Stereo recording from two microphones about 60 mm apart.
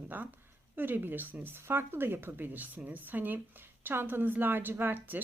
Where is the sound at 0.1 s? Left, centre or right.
Right.